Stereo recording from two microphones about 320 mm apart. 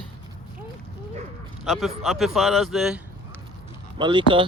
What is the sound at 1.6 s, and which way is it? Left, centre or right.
Speech, centre.